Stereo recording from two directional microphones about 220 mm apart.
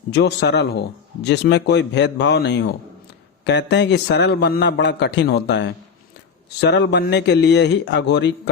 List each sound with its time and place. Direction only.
0.1 s speech: 50° left (ahead or behind)